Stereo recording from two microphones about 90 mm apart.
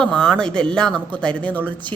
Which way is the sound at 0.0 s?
10° left (ahead or behind).